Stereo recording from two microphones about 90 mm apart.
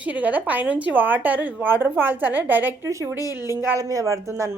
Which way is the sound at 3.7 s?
40° right (ahead or behind).